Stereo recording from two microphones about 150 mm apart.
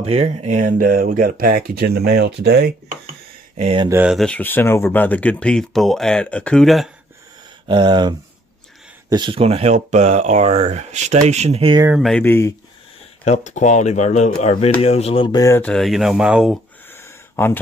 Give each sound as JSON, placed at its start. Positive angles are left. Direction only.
{"t": 0.0, "sound": "speech", "side_deg": -45}
{"t": 3.9, "sound": "speech", "side_deg": -10}
{"t": 4.2, "sound": "speech", "side_deg": 10}
{"t": 7.6, "sound": "speech", "side_deg": -30}
{"t": 9.1, "sound": "speech", "side_deg": -35}
{"t": 12.2, "sound": "speech", "side_deg": 15}
{"t": 13.2, "sound": "speech", "side_deg": 50}
{"t": 15.4, "sound": "speech", "side_deg": 15}
{"t": 15.7, "sound": "speech", "side_deg": 0}
{"t": 16.9, "sound": "a sound", "side_deg": 15}